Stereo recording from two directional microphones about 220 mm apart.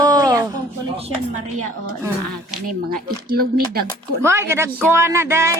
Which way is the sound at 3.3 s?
45° right (ahead or behind).